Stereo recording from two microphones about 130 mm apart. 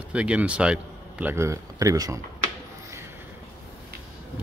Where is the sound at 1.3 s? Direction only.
20° right (ahead or behind).